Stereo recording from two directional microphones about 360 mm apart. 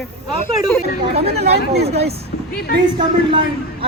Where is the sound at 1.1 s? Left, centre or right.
Centre.